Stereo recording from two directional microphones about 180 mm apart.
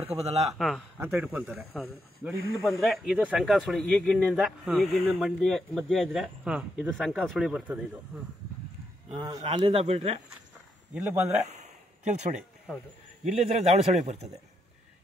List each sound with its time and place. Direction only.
0.0 s speech: 35° right (ahead or behind)
0.6 s speech: centre (ahead or behind)
0.9 s speech: 10° right (ahead or behind)
2.6 s speech: centre (ahead or behind)
9.1 s speech: 20° right (ahead or behind)
11.2 s a sound: 40° right (ahead or behind)
13.2 s speech: 35° right (ahead or behind)